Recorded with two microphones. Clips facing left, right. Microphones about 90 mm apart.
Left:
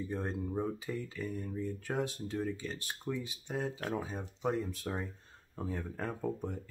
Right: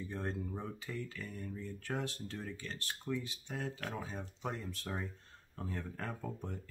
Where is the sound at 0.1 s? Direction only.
15° left (ahead or behind).